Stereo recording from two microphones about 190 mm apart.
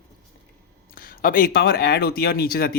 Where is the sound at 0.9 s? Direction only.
45° left (ahead or behind).